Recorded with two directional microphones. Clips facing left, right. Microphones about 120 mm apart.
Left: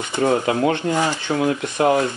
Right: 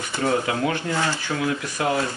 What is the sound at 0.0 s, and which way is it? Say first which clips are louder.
Speech: left 4 dB; 20° left (ahead or behind).